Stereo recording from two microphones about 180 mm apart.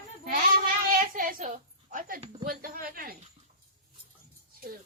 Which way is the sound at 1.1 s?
50° right (ahead or behind).